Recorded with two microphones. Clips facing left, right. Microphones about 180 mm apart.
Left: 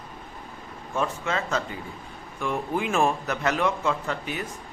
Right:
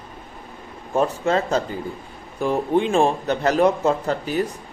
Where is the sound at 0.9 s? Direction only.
40° right (ahead or behind).